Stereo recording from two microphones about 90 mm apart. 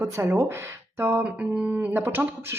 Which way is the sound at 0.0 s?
30° right (ahead or behind).